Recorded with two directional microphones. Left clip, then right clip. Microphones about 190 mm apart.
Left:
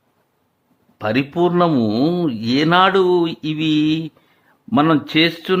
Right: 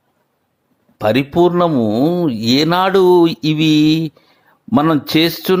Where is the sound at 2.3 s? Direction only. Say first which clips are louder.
Right 2 dB; 20° right (ahead or behind).